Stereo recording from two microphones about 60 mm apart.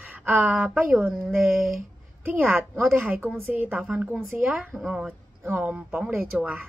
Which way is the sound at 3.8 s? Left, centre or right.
Centre.